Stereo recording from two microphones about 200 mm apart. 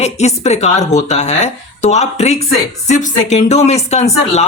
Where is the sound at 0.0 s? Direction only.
35° left (ahead or behind).